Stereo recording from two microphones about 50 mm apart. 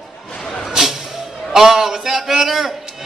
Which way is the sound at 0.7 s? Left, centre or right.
Centre.